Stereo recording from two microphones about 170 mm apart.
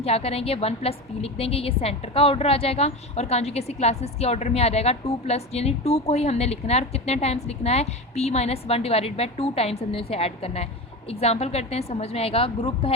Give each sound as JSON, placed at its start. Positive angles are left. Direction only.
{"t": 0.0, "sound": "a woman's voice", "side_deg": 35}